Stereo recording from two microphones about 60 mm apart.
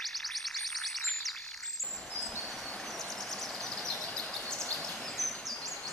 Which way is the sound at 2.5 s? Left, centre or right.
Centre.